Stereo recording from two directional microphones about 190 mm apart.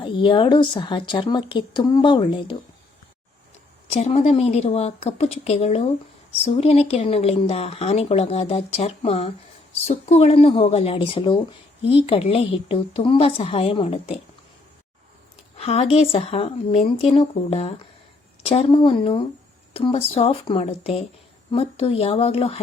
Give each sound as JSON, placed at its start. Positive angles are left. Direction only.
{"t": 0.0, "sound": "speech", "side_deg": 25}
{"t": 3.8, "sound": "speech", "side_deg": 35}
{"t": 15.5, "sound": "speech", "side_deg": 30}